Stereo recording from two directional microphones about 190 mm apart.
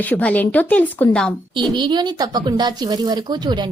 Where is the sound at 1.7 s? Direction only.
25° right (ahead or behind).